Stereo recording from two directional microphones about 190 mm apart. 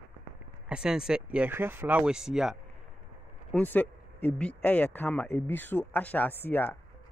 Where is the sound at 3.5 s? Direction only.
10° left (ahead or behind).